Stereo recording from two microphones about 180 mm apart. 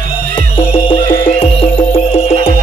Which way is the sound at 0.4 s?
30° left (ahead or behind).